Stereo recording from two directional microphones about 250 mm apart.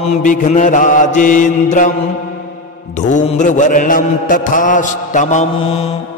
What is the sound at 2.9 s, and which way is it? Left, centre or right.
Mantra, left.